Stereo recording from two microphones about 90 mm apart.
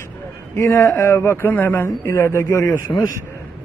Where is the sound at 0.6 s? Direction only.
35° left (ahead or behind).